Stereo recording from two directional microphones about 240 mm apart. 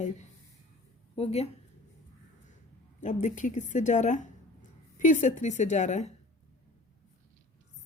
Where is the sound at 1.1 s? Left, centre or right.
Left.